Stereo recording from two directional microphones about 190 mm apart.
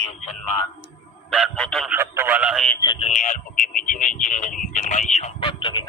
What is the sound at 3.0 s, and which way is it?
Speech, 40° left (ahead or behind).